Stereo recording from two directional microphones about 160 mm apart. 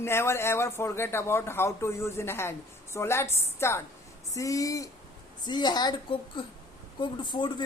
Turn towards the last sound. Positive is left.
turn(degrees=30)  # may be behind; listen again after turning